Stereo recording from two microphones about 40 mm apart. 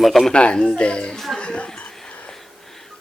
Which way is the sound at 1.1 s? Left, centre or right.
Centre.